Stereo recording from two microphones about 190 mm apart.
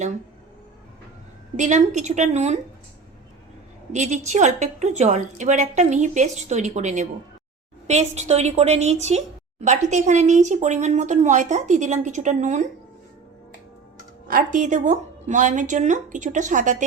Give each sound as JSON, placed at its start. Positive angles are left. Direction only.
{"t": 1.5, "sound": "a woman's voice", "side_deg": -40}
{"t": 3.9, "sound": "a woman's voice", "side_deg": -40}
{"t": 14.3, "sound": "a woman's voice", "side_deg": -45}